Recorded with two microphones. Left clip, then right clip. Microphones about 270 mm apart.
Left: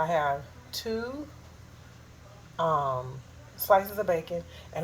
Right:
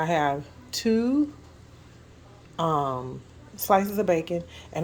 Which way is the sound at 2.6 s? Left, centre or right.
Right.